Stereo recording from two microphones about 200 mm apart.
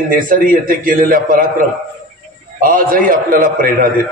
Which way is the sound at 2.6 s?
45° right (ahead or behind).